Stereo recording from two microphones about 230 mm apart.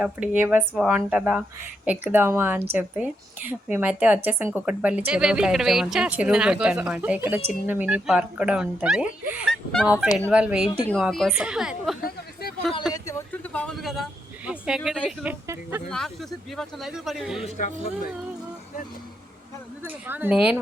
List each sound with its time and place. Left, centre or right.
0.0 s a woman's voice: centre
12.0 s a sound: left
12.9 s a sound: centre
14.8 s a woman's voice: centre
15.2 s speech: centre
15.9 s a woman's voice: centre
17.4 s speech: left
20.1 s speech: centre